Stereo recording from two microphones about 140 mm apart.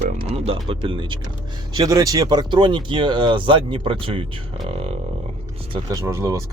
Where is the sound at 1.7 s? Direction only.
25° right (ahead or behind).